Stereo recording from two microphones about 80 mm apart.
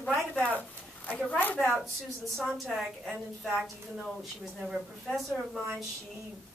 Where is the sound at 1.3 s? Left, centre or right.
Left.